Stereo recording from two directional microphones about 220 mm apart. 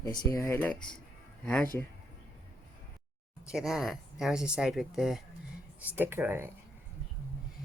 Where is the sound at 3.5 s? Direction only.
Centre (ahead or behind).